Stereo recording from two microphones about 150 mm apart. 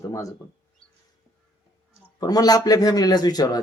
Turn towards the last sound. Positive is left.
turn(degrees=25)  # may be behind; listen again after turning